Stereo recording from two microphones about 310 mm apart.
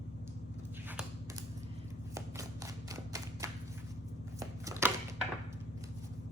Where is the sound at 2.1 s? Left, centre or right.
Centre.